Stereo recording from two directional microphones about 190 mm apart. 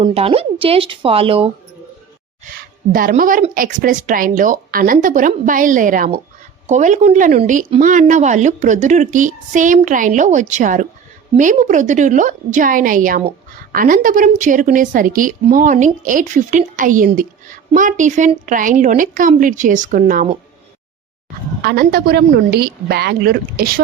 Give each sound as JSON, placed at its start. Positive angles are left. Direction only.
{"t": 0.0, "sound": "speech", "side_deg": -30}
{"t": 2.5, "sound": "a woman's voice", "side_deg": -50}
{"t": 21.6, "sound": "a woman's voice", "side_deg": -55}